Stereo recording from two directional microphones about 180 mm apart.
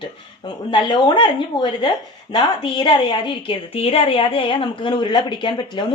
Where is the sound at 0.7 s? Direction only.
25° left (ahead or behind).